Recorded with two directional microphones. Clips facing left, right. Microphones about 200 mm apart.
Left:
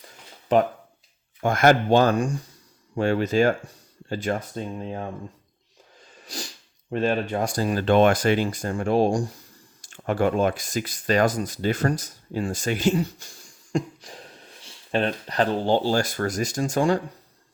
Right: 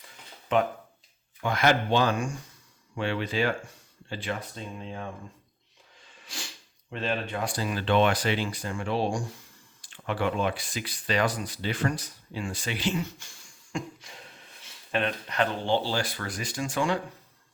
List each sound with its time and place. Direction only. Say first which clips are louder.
0.5 s speech: left 5 dB; 35° left (ahead or behind)
6.2 s sneeze: left 7 dB; 40° left (ahead or behind)
6.9 s speech: left 7 dB; 45° left (ahead or behind)